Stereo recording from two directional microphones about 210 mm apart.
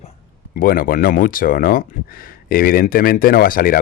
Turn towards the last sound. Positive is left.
turn(degrees=45)  # may be behind; listen again after turning